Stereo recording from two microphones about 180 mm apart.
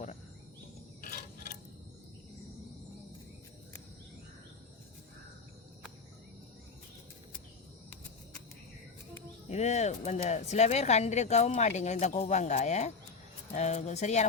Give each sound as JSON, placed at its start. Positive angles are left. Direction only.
{"t": 9.5, "sound": "speech", "side_deg": 40}